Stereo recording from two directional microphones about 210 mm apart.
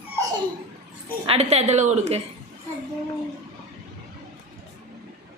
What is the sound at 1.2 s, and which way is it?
Speech, 30° right (ahead or behind).